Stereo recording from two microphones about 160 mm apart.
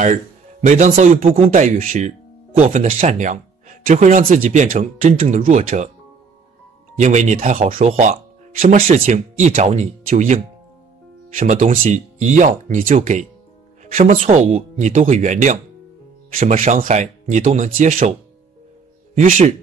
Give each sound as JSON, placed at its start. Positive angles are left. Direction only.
{"t": 0.0, "sound": "speech", "side_deg": -50}
{"t": 7.0, "sound": "speech", "side_deg": -50}
{"t": 19.1, "sound": "speech", "side_deg": -50}